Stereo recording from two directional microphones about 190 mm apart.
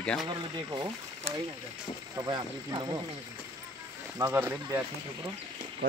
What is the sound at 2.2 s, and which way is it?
Speech, 20° right (ahead or behind).